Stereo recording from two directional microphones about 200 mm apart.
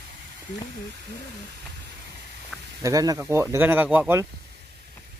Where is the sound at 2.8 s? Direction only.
15° right (ahead or behind).